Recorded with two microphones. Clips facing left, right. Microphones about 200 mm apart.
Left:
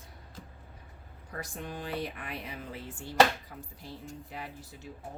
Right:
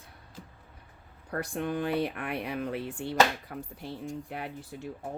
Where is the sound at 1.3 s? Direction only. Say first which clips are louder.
Right 8 dB; 60° right (ahead or behind).